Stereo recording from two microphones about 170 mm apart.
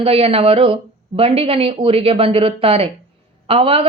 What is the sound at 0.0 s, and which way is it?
Speech, 35° right (ahead or behind).